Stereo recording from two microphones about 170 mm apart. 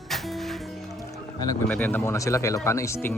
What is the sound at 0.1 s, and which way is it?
Music, centre (ahead or behind).